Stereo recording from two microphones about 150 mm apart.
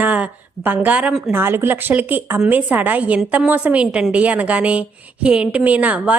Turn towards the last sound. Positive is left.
turn(degrees=-10)  # may be behind; listen again after turning